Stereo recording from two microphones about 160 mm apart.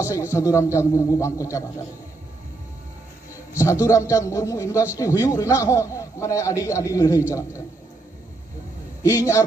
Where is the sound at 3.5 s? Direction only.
20° left (ahead or behind).